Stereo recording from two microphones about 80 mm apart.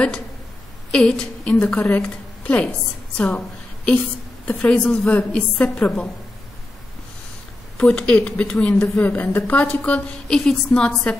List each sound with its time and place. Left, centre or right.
0.9 s a woman's voice: centre
7.7 s a woman's voice: centre
8.9 s a woman's voice: left
10.2 s a woman's voice: centre